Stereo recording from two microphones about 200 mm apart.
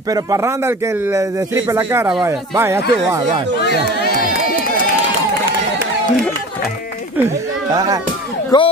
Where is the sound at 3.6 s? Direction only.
50° left (ahead or behind).